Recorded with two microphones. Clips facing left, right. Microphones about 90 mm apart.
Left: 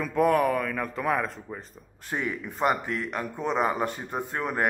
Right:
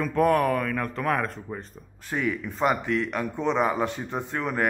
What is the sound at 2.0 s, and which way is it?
Speech, 15° left (ahead or behind).